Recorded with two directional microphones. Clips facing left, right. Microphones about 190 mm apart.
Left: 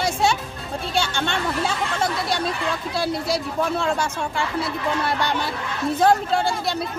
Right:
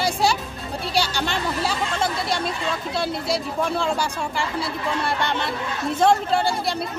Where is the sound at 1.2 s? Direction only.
Centre (ahead or behind).